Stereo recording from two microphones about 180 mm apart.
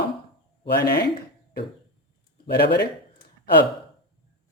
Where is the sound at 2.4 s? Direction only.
65° left (ahead or behind).